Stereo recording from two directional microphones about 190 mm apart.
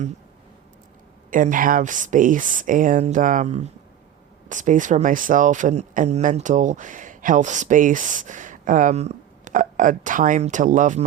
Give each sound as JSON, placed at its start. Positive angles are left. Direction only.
{"t": 1.3, "sound": "speech", "side_deg": -45}